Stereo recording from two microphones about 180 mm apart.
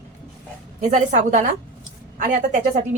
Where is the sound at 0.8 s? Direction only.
45° right (ahead or behind).